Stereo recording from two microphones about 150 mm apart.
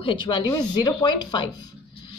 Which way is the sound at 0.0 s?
35° left (ahead or behind).